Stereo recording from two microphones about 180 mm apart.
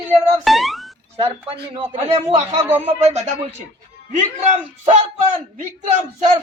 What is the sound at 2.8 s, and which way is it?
Speech, 35° right (ahead or behind).